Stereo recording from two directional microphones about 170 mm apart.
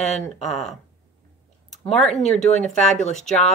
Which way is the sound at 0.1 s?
Centre (ahead or behind).